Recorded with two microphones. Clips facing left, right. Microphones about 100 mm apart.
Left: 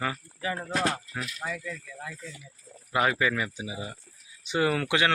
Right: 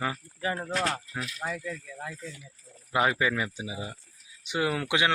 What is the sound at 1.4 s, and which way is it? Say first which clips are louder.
Speech: right 2 dB; 30° right (ahead or behind).